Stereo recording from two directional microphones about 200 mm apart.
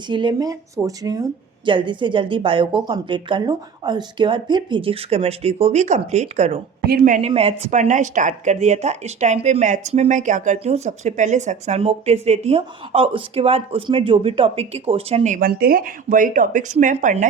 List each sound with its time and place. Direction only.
0.1 s speech: 25° right (ahead or behind)
6.8 s speech: 45° right (ahead or behind)